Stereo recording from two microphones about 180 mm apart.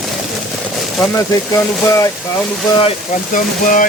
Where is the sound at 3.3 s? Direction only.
45° left (ahead or behind).